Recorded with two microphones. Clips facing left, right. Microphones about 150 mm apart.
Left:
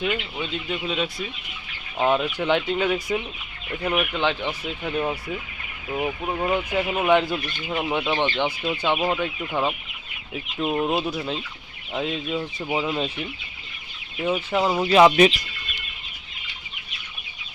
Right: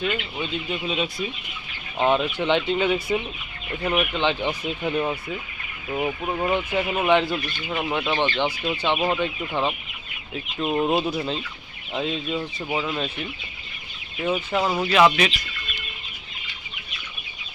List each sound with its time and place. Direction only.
0.3 s speech: centre (ahead or behind)
4.6 s speech: 15° right (ahead or behind)
4.9 s speech: centre (ahead or behind)
7.7 s speech: 10° left (ahead or behind)
8.8 s speech: centre (ahead or behind)
10.8 s speech: 5° right (ahead or behind); by 13.1 s 15° left (ahead or behind)
14.3 s speech: 10° left (ahead or behind)
14.6 s speech: 20° left (ahead or behind)
14.9 s speech: 35° left (ahead or behind)